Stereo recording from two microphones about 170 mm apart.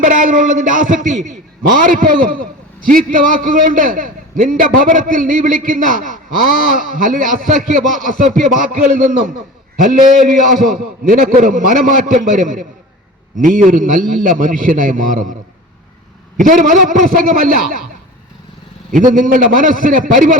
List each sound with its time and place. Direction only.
0.0 s a man's voice: 55° right (ahead or behind)
16.4 s a man's voice: 50° right (ahead or behind)
18.9 s a man's voice: 50° right (ahead or behind)